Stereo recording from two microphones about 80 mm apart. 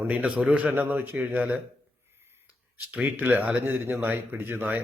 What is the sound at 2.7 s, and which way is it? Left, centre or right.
Speech, right.